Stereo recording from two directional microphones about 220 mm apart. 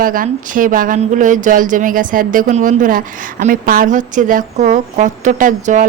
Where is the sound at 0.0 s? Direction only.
40° right (ahead or behind).